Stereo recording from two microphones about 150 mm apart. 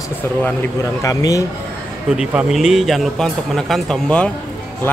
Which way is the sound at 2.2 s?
5° right (ahead or behind).